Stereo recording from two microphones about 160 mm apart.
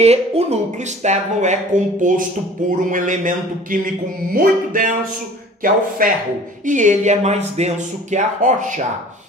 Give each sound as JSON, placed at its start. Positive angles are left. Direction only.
{"t": 0.0, "sound": "a woman's voice", "side_deg": -40}